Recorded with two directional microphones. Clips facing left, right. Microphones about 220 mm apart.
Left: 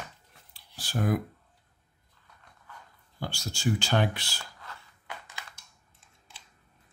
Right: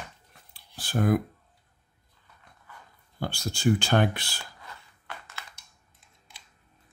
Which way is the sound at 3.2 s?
55° right (ahead or behind).